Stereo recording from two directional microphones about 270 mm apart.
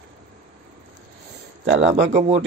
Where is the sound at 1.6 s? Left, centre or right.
Right.